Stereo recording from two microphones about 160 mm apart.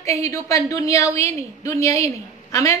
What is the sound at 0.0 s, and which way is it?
A woman's voice, 20° left (ahead or behind).